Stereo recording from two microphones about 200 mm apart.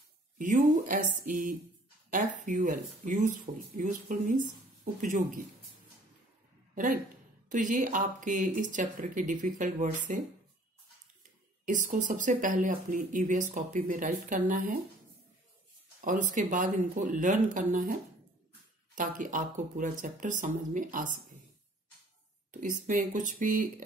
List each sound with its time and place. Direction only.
0.4 s speech: 40° right (ahead or behind)
7.5 s speech: 40° right (ahead or behind)
11.6 s speech: 40° right (ahead or behind)
16.0 s speech: 40° right (ahead or behind)
18.9 s speech: 40° right (ahead or behind)
22.5 s speech: 40° right (ahead or behind)